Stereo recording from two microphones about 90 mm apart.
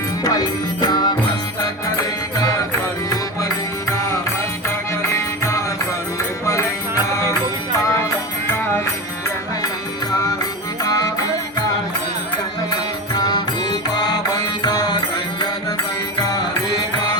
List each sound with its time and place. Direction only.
0.3 s music: 45° left (ahead or behind)
5.1 s music: 35° left (ahead or behind)
13.1 s music: 50° left (ahead or behind)